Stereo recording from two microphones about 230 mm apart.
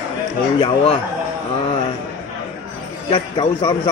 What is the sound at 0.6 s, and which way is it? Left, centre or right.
Speech, left.